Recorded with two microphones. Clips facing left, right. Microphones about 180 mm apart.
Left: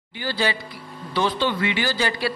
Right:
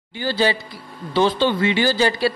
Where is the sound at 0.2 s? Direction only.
30° right (ahead or behind).